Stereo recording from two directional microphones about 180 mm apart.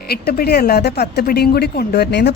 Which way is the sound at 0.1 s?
60° left (ahead or behind).